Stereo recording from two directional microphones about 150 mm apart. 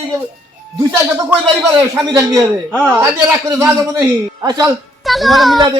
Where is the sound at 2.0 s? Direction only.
25° right (ahead or behind).